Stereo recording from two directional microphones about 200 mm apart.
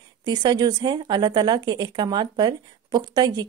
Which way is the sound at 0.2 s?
20° right (ahead or behind).